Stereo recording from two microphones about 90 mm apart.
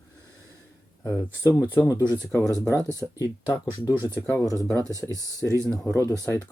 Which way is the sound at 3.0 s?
25° left (ahead or behind).